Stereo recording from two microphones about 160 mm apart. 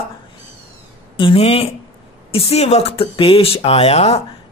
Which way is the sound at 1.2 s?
35° left (ahead or behind).